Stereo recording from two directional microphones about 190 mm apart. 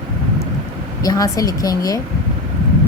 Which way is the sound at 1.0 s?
20° left (ahead or behind).